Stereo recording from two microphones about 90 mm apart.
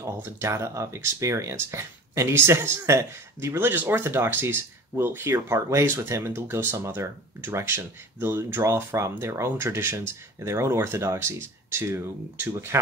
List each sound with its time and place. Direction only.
0.0 s speech: 30° right (ahead or behind)